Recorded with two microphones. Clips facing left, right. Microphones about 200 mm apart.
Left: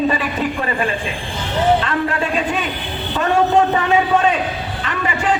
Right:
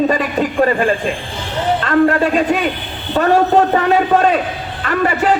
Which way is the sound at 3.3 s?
40° right (ahead or behind).